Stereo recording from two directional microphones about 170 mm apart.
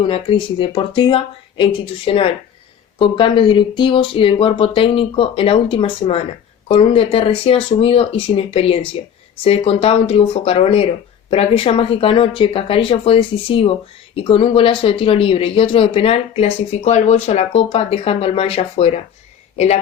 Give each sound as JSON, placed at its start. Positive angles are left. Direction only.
{"t": 0.0, "sound": "a man's voice", "side_deg": 30}